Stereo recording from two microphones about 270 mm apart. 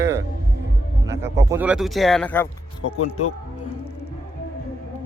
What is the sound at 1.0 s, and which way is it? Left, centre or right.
Speech, centre.